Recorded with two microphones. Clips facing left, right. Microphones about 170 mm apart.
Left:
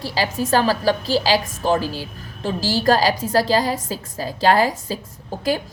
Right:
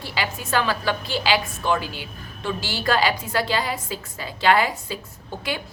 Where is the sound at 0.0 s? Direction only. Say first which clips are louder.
Left 6 dB; 35° left (ahead or behind).